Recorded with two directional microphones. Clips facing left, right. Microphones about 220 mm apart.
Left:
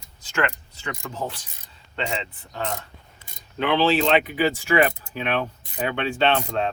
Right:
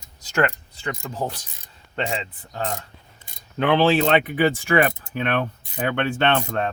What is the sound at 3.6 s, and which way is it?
Speech, 50° right (ahead or behind).